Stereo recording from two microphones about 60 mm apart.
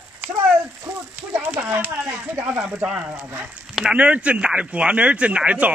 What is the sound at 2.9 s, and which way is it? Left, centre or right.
Speech, right.